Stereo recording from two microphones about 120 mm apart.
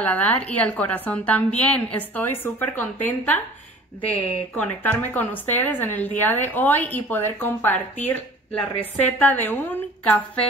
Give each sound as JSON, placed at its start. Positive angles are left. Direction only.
{"t": 0.0, "sound": "a woman's voice", "side_deg": 15}